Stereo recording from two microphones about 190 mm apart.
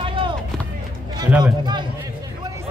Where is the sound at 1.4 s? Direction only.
20° right (ahead or behind).